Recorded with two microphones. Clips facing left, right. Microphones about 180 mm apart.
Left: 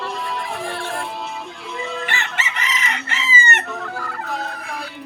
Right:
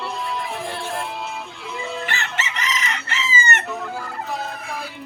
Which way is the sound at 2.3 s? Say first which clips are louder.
Even; 55° left (ahead or behind).